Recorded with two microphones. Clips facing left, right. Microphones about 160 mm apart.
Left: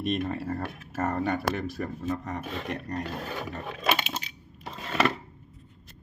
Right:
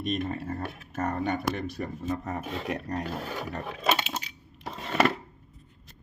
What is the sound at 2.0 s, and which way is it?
Speech, 5° right (ahead or behind).